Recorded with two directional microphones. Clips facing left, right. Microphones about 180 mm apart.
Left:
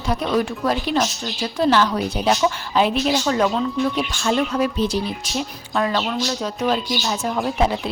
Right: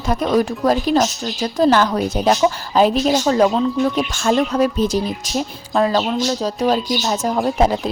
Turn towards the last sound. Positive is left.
turn(degrees=-40)  # may be behind; listen again after turning